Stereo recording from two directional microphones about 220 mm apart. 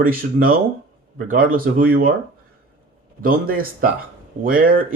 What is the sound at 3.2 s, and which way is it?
Speech, 40° right (ahead or behind).